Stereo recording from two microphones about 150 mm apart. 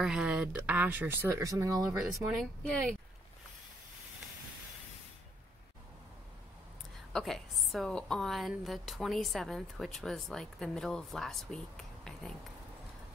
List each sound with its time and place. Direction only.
0.0 s speech: 5° right (ahead or behind); by 2.0 s 20° right (ahead or behind)
2.0 s a woman's voice: centre (ahead or behind)
7.1 s a woman's voice: centre (ahead or behind)